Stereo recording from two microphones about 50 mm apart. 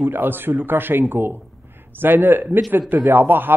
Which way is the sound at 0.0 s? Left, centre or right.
Right.